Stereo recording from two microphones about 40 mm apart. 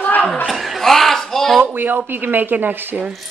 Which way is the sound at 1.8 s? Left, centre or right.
Right.